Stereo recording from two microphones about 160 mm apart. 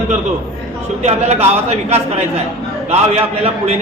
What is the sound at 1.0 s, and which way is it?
A man's voice, 40° right (ahead or behind).